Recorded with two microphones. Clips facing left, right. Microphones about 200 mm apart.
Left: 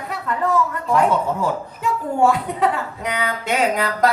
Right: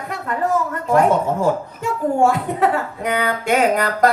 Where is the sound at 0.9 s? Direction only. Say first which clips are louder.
Right 3 dB; 45° right (ahead or behind).